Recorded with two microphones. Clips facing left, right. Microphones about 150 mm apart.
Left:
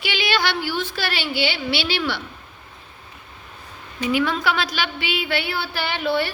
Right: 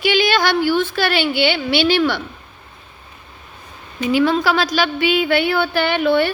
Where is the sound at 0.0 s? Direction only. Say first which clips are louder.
Right 7 dB; 45° right (ahead or behind).